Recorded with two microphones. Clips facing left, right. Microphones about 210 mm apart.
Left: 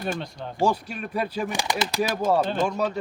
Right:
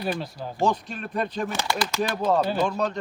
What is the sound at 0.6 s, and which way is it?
Speech, 10° left (ahead or behind).